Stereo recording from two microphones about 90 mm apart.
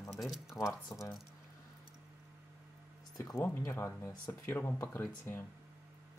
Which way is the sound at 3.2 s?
40° left (ahead or behind).